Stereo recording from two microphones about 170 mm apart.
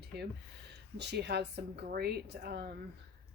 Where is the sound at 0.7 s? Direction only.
85° right.